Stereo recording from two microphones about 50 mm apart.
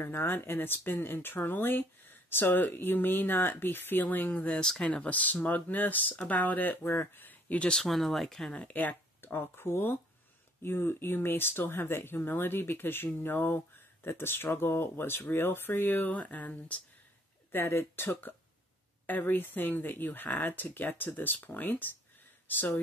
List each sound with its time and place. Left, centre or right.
0.0 s speech: left
4.6 s speech: centre; by 7.0 s left
7.2 s a sound: left
7.6 s speech: centre
8.5 s speech: left
17.5 s speech: left
19.0 s speech: left